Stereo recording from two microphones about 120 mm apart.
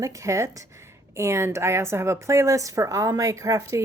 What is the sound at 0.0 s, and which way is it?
A woman's voice, 25° right (ahead or behind).